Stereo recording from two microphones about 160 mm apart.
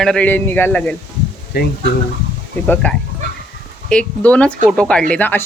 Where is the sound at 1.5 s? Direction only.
85° left.